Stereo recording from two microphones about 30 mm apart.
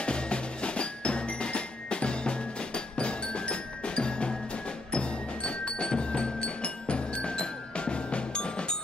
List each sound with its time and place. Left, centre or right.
0.0 s music: left